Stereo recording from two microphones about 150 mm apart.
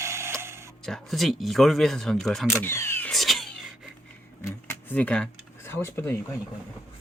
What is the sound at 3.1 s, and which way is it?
Cat, centre (ahead or behind).